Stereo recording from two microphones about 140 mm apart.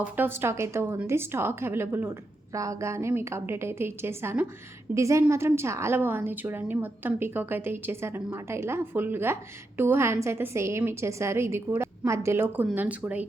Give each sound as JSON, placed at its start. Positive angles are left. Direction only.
{"t": 0.0, "sound": "a woman's voice", "side_deg": -15}